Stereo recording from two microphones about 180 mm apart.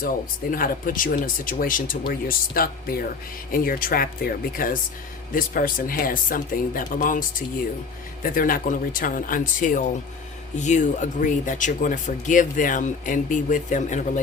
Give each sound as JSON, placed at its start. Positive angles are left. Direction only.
{"t": 0.5, "sound": "speech", "side_deg": 50}